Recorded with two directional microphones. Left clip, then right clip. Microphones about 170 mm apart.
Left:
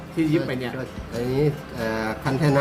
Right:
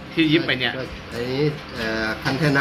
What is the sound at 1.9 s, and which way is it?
Speech, 90° left.